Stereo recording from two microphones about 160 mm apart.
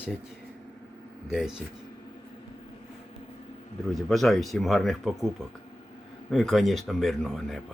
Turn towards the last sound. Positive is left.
turn(degrees=0)  # may be behind; listen again after turning